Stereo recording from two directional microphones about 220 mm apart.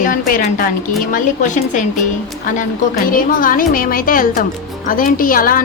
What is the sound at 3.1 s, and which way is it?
A woman's voice, 40° left (ahead or behind).